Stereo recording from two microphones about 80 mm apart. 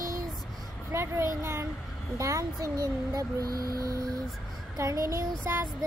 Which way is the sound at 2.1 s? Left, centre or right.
Right.